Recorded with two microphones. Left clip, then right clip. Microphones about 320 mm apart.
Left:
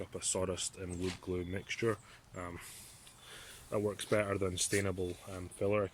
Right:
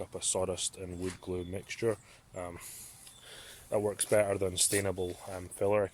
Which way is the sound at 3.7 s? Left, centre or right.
Centre.